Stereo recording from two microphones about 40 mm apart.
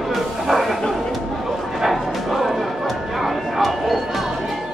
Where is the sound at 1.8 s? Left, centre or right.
Centre.